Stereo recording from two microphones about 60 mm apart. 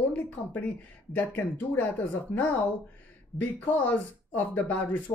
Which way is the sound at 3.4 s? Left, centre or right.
Left.